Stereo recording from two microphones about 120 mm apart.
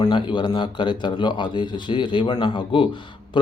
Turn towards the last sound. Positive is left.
turn(degrees=45)  # may be behind; listen again after turning